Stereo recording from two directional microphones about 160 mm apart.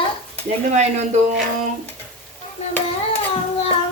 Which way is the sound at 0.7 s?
45° right (ahead or behind).